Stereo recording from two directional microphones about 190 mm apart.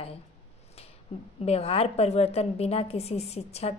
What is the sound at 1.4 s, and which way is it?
A woman's voice, 30° left (ahead or behind).